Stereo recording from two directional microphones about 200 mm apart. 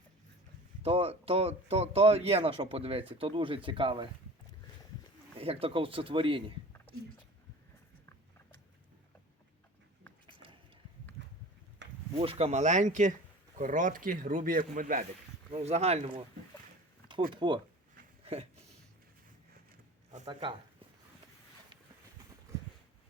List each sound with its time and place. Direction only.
0.8 s speech: 30° right (ahead or behind)
5.4 s speech: 30° right (ahead or behind)
11.8 s a sound: 65° right (ahead or behind)
12.2 s speech: 30° right (ahead or behind)
17.3 s speech: 25° right (ahead or behind)
20.2 s speech: 20° right (ahead or behind)